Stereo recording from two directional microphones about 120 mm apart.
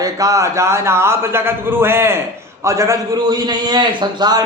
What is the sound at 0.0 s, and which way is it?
A man's voice, 30° right (ahead or behind).